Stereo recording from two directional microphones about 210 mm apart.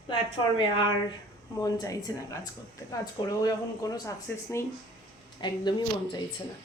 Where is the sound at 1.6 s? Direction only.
15° left (ahead or behind).